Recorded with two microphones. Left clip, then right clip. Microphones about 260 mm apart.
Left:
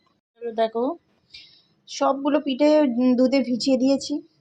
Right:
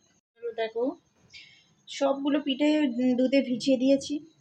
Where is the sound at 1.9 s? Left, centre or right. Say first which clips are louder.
Left 5 dB; centre.